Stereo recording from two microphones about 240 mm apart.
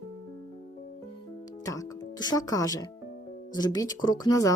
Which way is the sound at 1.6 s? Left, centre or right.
Centre.